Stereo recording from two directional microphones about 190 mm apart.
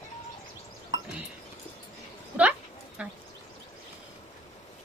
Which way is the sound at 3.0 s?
5° right (ahead or behind).